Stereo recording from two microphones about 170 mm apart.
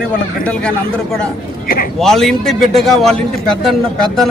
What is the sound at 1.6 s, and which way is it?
Speech, 55° left (ahead or behind).